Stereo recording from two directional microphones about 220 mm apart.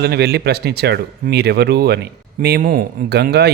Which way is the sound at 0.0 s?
45° right (ahead or behind).